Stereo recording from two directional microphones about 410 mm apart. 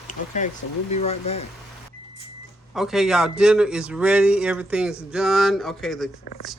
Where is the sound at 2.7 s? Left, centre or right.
Centre.